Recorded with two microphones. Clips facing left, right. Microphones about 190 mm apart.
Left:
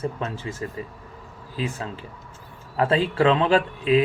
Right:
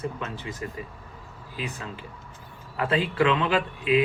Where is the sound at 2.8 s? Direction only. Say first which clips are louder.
Left 4 dB; 35° left (ahead or behind).